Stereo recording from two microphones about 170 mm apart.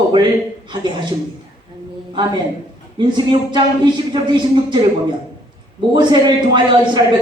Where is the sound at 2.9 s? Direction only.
25° right (ahead or behind).